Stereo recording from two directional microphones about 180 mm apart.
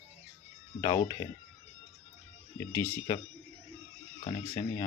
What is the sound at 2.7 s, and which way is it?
Speech, 15° left (ahead or behind).